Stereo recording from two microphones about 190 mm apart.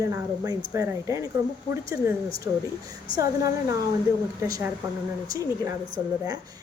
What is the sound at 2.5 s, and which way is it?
A woman's voice, 15° right (ahead or behind).